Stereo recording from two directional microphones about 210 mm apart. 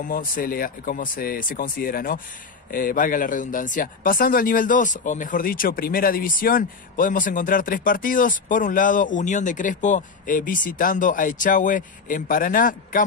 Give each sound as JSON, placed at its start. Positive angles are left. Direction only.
{"t": 0.0, "sound": "speech", "side_deg": 40}